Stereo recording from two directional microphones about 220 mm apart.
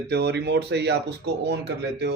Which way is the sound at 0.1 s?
50° right (ahead or behind).